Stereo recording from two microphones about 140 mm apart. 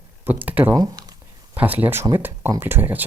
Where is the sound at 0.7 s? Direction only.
25° right (ahead or behind).